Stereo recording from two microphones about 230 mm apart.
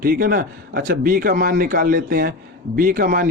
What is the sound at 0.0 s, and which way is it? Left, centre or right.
Speech, right.